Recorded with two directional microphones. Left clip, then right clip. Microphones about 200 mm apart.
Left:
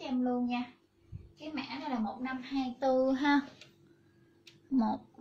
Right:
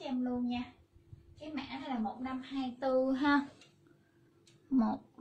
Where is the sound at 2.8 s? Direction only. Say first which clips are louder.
Left 2 dB; 10° right (ahead or behind).